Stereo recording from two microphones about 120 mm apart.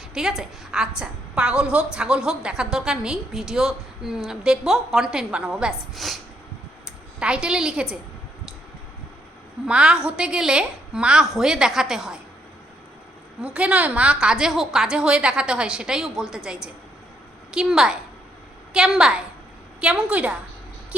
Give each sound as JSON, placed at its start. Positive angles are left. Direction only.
{"t": 0.1, "sound": "a woman's voice", "side_deg": -5}
{"t": 7.2, "sound": "a woman's voice", "side_deg": -10}
{"t": 9.6, "sound": "a woman's voice", "side_deg": -10}
{"t": 13.4, "sound": "a woman's voice", "side_deg": -10}